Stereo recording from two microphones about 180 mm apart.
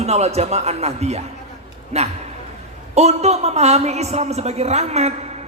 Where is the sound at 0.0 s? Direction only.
35° right (ahead or behind).